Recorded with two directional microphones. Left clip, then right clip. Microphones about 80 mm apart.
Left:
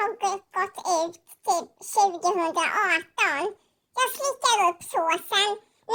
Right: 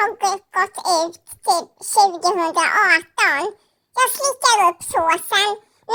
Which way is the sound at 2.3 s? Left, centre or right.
Right.